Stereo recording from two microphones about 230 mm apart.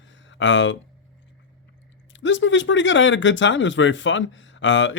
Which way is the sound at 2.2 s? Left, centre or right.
Left.